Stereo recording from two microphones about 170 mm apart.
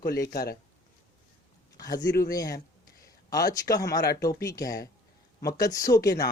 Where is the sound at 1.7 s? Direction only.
20° left (ahead or behind).